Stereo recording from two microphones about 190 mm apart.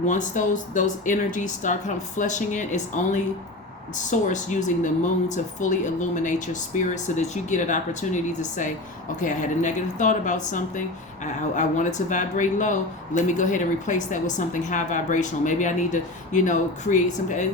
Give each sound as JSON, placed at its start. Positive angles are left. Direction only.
{"t": 0.1, "sound": "a woman's voice", "side_deg": 40}